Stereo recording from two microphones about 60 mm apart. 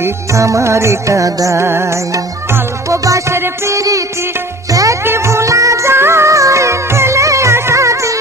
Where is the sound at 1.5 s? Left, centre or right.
Right.